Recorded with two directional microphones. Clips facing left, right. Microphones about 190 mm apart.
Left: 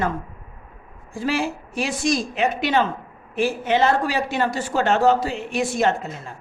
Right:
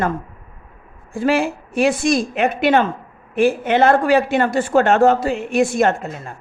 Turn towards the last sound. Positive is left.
turn(degrees=-50)  # may be behind; listen again after turning